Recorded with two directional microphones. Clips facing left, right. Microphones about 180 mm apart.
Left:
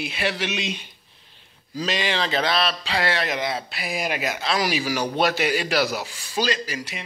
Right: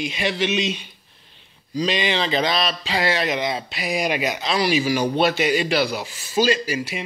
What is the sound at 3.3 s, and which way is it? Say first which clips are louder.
Speech: right 2 dB; 20° right (ahead or behind).